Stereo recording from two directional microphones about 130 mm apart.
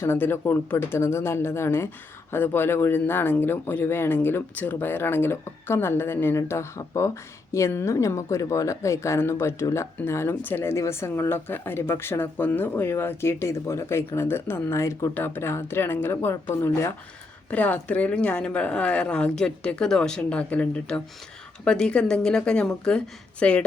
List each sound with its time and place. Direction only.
0.0 s speech: 20° left (ahead or behind)